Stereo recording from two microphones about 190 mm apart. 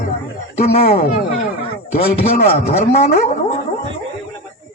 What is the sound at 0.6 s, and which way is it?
A man's voice, 35° left (ahead or behind).